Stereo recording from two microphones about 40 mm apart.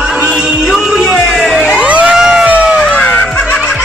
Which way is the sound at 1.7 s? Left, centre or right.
Right.